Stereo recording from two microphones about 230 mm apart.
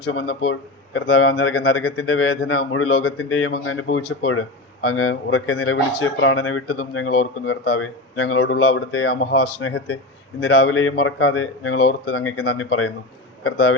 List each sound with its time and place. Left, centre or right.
0.0 s speech: left